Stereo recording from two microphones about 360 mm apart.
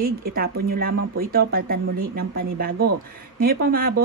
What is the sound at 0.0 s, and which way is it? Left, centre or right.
Speech, right.